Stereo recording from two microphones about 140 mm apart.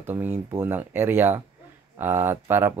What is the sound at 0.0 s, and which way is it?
Speech, 15° right (ahead or behind).